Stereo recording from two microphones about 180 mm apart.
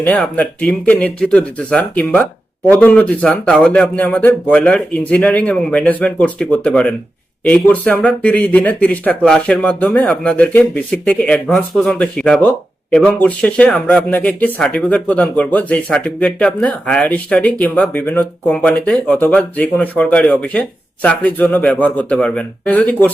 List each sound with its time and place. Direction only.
0.0 s speech: 10° left (ahead or behind)